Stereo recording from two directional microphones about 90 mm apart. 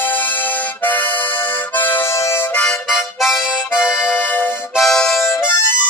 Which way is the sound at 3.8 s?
5° right (ahead or behind).